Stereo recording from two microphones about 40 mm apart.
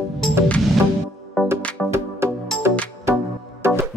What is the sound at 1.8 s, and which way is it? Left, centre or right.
Music, centre.